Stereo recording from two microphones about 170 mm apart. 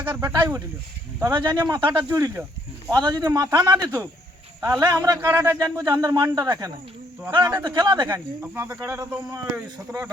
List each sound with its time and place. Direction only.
0.3 s a man's voice: 25° right (ahead or behind)
4.6 s speech: 10° right (ahead or behind)
4.9 s a man's voice: 20° right (ahead or behind)
8.0 s a man's voice: 10° right (ahead or behind)